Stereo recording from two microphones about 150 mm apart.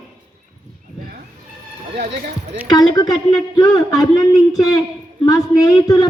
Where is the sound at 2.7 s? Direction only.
25° left (ahead or behind).